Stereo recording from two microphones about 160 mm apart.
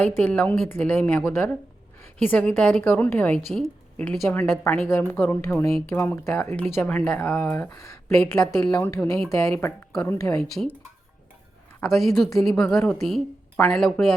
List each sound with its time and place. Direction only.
0.0 s a woman's voice: 10° left (ahead or behind)
11.8 s a woman's voice: centre (ahead or behind)